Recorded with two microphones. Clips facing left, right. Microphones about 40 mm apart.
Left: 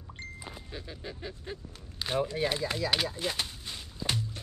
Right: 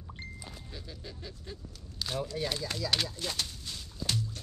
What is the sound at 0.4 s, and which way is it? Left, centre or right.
Speech, left.